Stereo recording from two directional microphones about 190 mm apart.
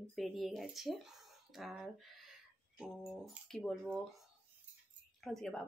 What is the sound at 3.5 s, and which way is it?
Speech, 5° left (ahead or behind).